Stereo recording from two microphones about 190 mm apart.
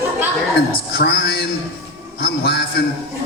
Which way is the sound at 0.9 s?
60° left (ahead or behind).